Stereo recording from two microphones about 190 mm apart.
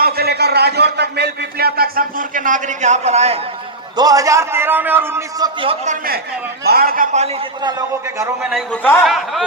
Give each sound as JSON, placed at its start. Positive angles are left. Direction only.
{"t": 0.0, "sound": "a man's voice", "side_deg": -55}
{"t": 3.9, "sound": "a man's voice", "side_deg": -20}
{"t": 5.5, "sound": "a man's voice", "side_deg": -35}
{"t": 6.7, "sound": "a man's voice", "side_deg": -50}
{"t": 7.6, "sound": "a man's voice", "side_deg": -20}
{"t": 8.4, "sound": "a man's voice", "side_deg": -5}
{"t": 8.8, "sound": "a man's voice", "side_deg": 10}
{"t": 9.0, "sound": "a man's voice", "side_deg": 0}